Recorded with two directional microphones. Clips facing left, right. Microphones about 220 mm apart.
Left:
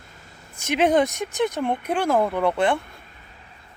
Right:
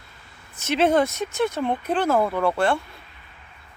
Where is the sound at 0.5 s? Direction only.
15° left (ahead or behind).